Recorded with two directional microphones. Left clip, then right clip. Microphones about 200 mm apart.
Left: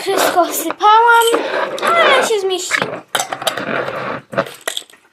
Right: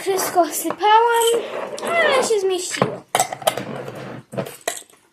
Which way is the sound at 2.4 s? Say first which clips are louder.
Left 3 dB; 30° left (ahead or behind).